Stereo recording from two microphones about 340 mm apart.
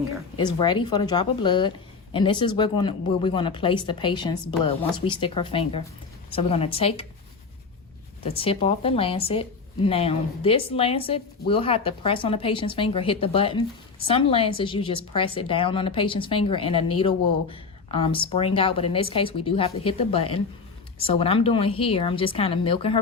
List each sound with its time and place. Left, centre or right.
0.3 s a woman's voice: centre
8.2 s a woman's voice: centre